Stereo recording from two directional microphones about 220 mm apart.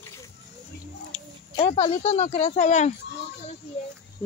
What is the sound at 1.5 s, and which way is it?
Speech, 25° left (ahead or behind).